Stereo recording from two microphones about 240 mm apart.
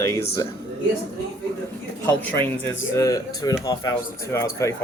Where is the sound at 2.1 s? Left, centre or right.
Centre.